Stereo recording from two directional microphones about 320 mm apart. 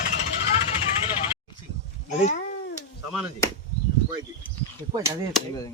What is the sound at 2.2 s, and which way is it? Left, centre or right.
Cat, left.